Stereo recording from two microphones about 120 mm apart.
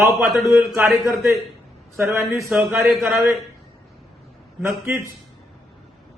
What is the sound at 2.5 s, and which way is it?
Speech, centre (ahead or behind).